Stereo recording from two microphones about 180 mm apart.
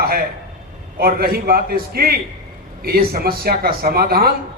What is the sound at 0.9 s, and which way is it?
A man's voice, 55° right (ahead or behind).